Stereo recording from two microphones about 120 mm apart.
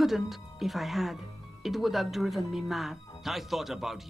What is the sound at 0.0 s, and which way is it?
Speech, centre (ahead or behind).